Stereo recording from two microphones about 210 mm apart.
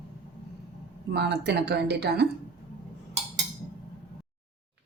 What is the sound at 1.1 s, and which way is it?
A woman's voice, 50° right (ahead or behind).